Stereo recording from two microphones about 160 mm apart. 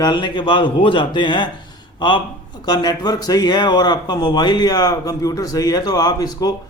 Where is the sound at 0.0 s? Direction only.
25° left (ahead or behind).